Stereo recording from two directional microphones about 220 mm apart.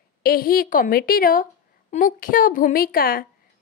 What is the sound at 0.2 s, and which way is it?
A woman's voice, 40° left (ahead or behind).